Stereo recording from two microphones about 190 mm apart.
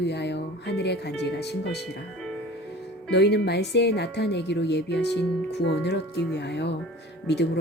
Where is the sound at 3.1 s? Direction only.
60° left (ahead or behind).